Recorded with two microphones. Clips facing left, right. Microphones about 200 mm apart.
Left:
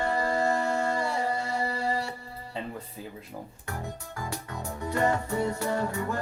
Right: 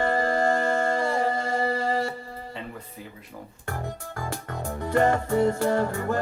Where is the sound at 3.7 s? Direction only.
50° right (ahead or behind).